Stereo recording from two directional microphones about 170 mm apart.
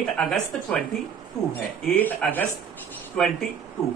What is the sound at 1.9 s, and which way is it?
Speech, 10° left (ahead or behind).